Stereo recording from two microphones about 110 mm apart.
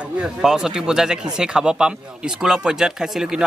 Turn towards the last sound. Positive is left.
turn(degrees=-5)  # may be behind; listen again after turning